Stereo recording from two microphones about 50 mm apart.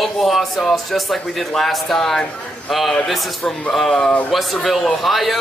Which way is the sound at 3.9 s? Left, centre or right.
Left.